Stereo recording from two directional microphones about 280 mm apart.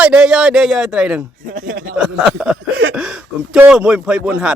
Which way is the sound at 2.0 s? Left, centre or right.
Centre.